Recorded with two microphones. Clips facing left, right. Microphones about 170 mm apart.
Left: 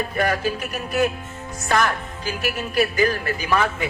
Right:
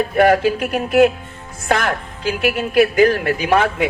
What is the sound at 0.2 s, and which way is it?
Speech, 65° right (ahead or behind).